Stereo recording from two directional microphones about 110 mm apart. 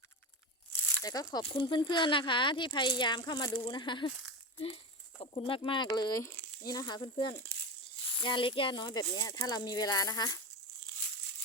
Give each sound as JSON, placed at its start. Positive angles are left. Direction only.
{"t": 1.0, "sound": "speech", "side_deg": 35}
{"t": 1.4, "sound": "speech", "side_deg": 50}
{"t": 5.2, "sound": "speech", "side_deg": 55}
{"t": 6.8, "sound": "speech", "side_deg": 45}
{"t": 7.5, "sound": "a sound", "side_deg": -30}
{"t": 8.1, "sound": "speech", "side_deg": 45}